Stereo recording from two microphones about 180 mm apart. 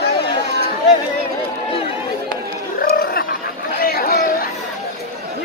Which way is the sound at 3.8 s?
55° left (ahead or behind).